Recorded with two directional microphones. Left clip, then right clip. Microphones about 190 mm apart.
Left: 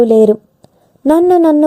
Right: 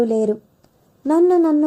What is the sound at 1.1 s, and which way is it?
Speech, 45° left (ahead or behind).